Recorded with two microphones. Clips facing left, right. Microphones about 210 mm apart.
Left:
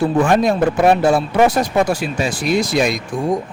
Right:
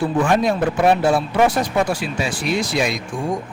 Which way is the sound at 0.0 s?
45° left (ahead or behind).